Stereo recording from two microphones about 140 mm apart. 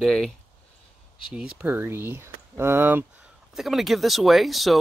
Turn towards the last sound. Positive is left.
turn(degrees=0)  # may be behind; listen again after turning